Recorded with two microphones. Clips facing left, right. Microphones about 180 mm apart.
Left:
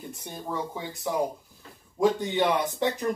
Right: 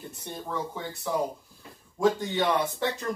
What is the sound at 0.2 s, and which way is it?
Speech, 10° left (ahead or behind).